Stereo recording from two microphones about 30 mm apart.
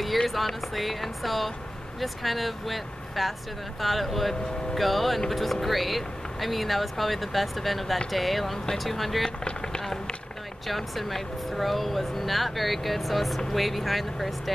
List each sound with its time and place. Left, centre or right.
0.5 s speech: centre
9.4 s firecracker: left
11.5 s speech: centre